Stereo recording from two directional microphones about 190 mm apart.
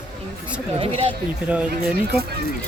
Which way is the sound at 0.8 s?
30° right (ahead or behind).